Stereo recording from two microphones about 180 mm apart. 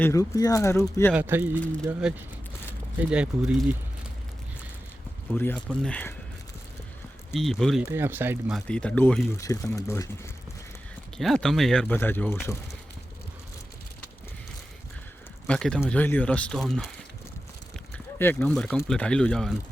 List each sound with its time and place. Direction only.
0.0 s speech: 15° left (ahead or behind)
1.1 s speech: 10° right (ahead or behind)
5.3 s speech: 10° left (ahead or behind)
7.3 s speech: centre (ahead or behind)
7.9 s speech: 10° right (ahead or behind)
8.4 s speech: 5° left (ahead or behind)
11.2 s speech: centre (ahead or behind)
15.4 s speech: 5° left (ahead or behind)
17.9 s speech: 10° left (ahead or behind)